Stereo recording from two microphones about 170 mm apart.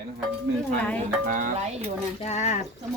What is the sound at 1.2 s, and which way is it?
Speech, 50° right (ahead or behind).